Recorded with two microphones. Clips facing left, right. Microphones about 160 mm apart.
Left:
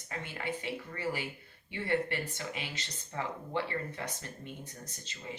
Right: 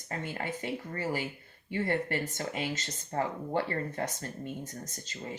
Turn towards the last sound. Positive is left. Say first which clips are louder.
# right 4 dB
turn(degrees=-40)  # may be behind; listen again after turning